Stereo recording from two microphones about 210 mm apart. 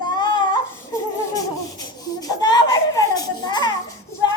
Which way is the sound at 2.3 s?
20° left (ahead or behind).